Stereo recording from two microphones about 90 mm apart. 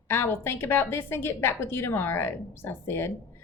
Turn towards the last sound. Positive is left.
turn(degrees=25)  # may be behind; listen again after turning